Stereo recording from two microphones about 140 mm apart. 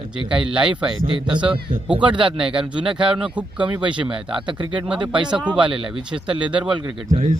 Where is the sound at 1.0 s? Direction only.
35° right (ahead or behind).